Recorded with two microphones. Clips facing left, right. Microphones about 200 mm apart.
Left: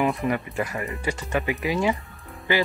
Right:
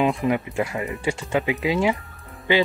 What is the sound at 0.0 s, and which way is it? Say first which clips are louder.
Speech: right 3 dB; 15° right (ahead or behind).